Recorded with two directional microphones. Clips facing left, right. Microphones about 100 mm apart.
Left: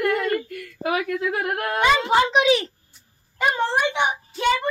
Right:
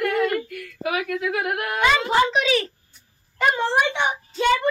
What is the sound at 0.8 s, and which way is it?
Speech, 35° left (ahead or behind).